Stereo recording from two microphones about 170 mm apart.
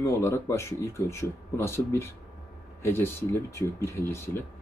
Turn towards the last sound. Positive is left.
turn(degrees=15)  # may be behind; listen again after turning